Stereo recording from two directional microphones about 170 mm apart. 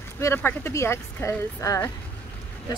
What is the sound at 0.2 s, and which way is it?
Speech, 15° left (ahead or behind).